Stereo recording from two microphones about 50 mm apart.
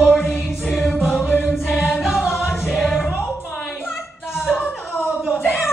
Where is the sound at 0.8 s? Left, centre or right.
Centre.